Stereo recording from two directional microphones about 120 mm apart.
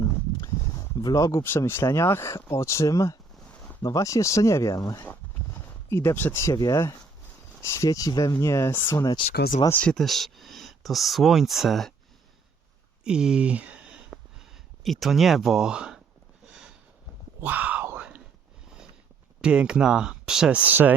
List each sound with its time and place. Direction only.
0.4 s speech: 30° left (ahead or behind)
3.5 s a sound: 10° left (ahead or behind)
3.8 s speech: 30° left (ahead or behind)
5.5 s speech: 20° left (ahead or behind)
9.9 s speech: centre (ahead or behind)
13.1 s a sound: 5° right (ahead or behind)
14.8 s speech: centre (ahead or behind)
17.4 s a sound: 15° right (ahead or behind)
19.4 s speech: 10° right (ahead or behind)